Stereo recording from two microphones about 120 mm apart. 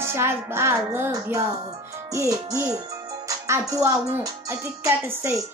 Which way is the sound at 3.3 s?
25° right (ahead or behind).